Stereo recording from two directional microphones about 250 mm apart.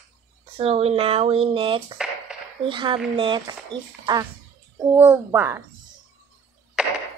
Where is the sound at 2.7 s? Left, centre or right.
Centre.